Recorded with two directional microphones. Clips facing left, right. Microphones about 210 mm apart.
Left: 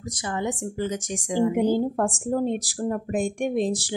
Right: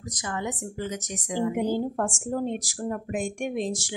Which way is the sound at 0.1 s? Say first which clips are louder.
Left 4 dB; 30° left (ahead or behind).